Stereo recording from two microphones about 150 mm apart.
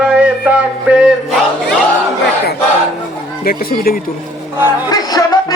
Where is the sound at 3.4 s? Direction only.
75° left (ahead or behind).